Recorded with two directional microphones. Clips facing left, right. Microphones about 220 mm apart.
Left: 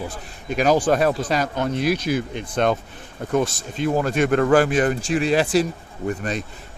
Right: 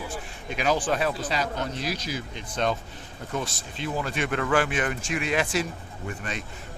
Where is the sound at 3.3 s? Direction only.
45° left (ahead or behind).